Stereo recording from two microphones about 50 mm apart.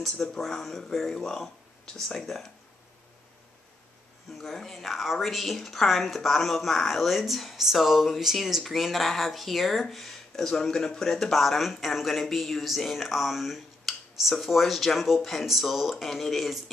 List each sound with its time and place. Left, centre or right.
0.0 s speech: centre
4.3 s speech: centre